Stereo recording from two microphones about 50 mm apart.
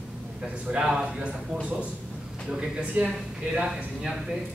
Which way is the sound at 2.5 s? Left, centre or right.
Right.